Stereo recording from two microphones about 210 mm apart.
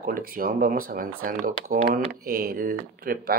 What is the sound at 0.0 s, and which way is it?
Speech, 45° right (ahead or behind).